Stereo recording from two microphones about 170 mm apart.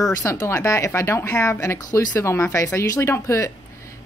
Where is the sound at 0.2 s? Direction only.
15° left (ahead or behind).